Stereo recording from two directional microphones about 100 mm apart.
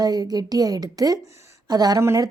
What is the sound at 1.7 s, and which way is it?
Speech, 40° right (ahead or behind).